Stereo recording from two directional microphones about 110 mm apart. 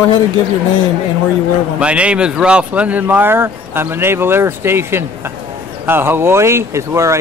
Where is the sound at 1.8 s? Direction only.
10° right (ahead or behind).